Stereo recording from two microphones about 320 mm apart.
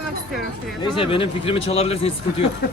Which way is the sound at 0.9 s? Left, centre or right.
Centre.